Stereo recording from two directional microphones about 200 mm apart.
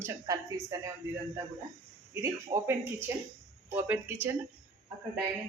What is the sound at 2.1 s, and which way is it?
Speech, 10° right (ahead or behind).